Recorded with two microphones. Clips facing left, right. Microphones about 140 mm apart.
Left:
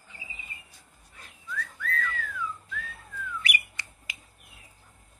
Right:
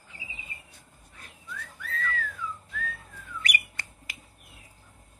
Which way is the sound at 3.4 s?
45° right (ahead or behind).